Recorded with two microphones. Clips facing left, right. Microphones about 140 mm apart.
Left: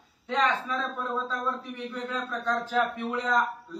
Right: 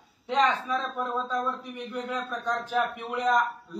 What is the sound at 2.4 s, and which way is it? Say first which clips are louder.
A man's voice: left 1 dB; 15° right (ahead or behind).